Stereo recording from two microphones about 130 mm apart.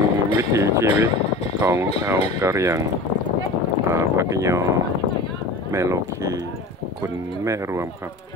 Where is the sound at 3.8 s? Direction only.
20° right (ahead or behind).